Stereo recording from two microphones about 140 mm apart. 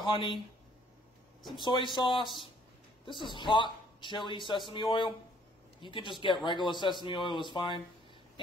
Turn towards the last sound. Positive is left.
turn(degrees=35)  # may be behind; listen again after turning